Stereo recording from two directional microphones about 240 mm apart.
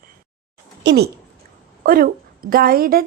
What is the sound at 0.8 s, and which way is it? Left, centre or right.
Speech, right.